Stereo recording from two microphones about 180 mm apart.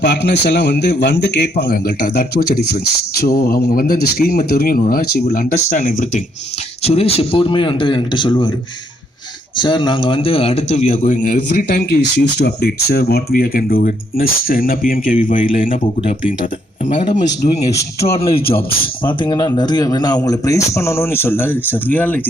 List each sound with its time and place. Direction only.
0.0 s a man's voice: 70° left (ahead or behind); by 6.2 s 45° left (ahead or behind)
6.8 s speech: 35° left (ahead or behind)
9.6 s a man's voice: 25° left (ahead or behind); by 11.3 s 45° left (ahead or behind)
11.3 s a man's voice: 60° left (ahead or behind)
19.0 s speech: 25° left (ahead or behind); by 22.2 s 10° left (ahead or behind)